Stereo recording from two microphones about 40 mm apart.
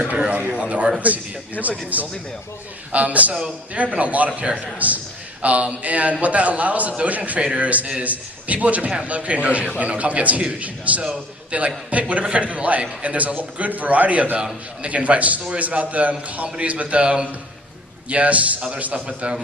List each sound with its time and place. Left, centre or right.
0.3 s a man's voice: right
1.6 s speech: left
1.9 s a man's voice: right
4.3 s a man's voice: right
4.6 s a man's voice: right
18.1 s a man's voice: right